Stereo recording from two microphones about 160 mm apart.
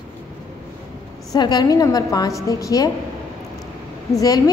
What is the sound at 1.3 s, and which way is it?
A woman's voice, 25° left (ahead or behind).